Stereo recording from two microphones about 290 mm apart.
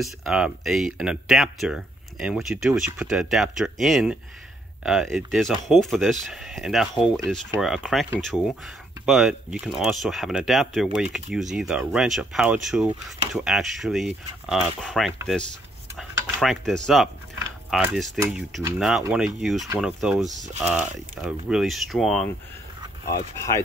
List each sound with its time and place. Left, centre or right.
0.0 s speech: centre
20.2 s speech: right
21.2 s speech: centre